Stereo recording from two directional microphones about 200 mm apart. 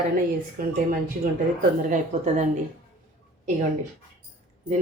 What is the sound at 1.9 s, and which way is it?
Speech, 35° right (ahead or behind).